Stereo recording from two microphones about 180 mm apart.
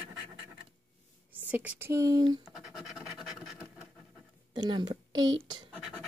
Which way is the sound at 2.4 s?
Centre (ahead or behind).